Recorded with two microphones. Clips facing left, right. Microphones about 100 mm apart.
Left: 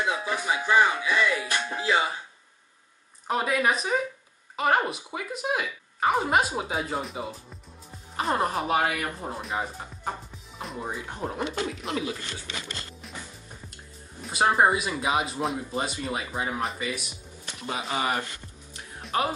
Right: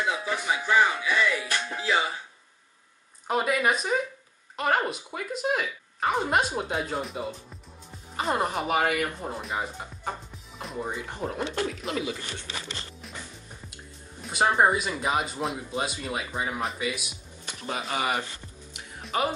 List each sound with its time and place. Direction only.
0.2 s music: 15° left (ahead or behind)
3.3 s speech: centre (ahead or behind)
14.2 s speech: centre (ahead or behind)
18.8 s music: centre (ahead or behind)